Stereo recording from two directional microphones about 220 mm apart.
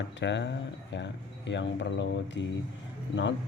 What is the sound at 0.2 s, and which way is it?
Speech, 55° left (ahead or behind).